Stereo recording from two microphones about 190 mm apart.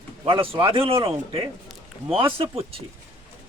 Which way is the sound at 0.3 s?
30° right (ahead or behind).